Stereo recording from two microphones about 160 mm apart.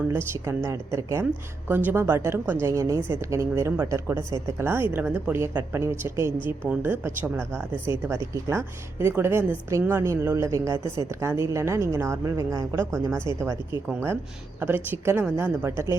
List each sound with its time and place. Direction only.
0.1 s a woman's voice: 15° right (ahead or behind)
14.6 s a woman's voice: 15° right (ahead or behind)